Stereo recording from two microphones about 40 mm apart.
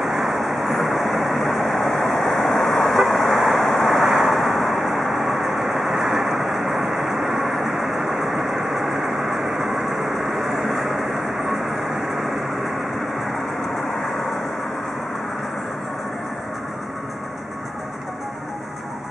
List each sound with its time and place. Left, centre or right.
0.0 s vehicle: centre